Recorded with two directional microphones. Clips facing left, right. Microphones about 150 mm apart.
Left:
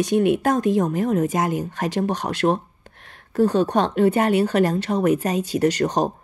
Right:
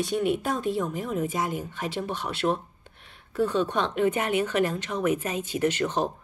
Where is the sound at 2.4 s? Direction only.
45° left (ahead or behind).